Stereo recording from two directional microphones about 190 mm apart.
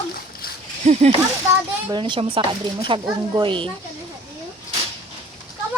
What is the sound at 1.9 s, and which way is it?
Speech, 25° right (ahead or behind).